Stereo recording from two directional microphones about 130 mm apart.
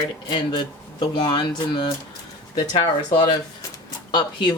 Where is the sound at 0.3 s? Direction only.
35° left (ahead or behind).